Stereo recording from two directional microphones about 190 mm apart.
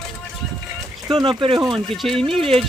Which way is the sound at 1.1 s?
25° right (ahead or behind).